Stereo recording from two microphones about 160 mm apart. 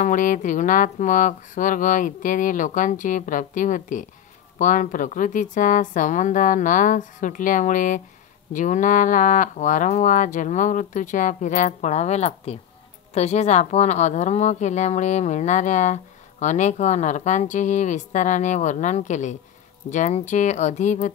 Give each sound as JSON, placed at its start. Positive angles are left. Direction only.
{"t": 0.0, "sound": "a woman's voice", "side_deg": 55}